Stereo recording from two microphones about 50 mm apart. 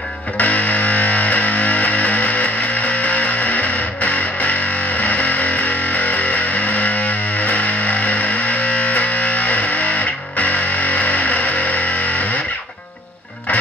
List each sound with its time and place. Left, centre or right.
0.4 s music: left